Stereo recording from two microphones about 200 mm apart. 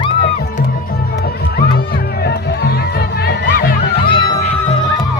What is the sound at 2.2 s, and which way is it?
Music, 55° left (ahead or behind).